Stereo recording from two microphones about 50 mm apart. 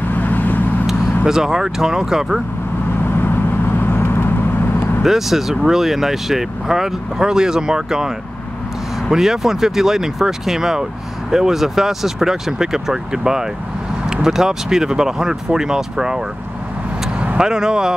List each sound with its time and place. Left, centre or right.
0.1 s vehicle: left
0.8 s speech: centre
3.0 s vehicle: left
5.0 s speech: centre
9.1 s speech: centre
17.4 s speech: centre